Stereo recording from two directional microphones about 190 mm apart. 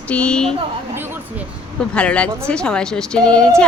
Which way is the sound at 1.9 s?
5° left (ahead or behind).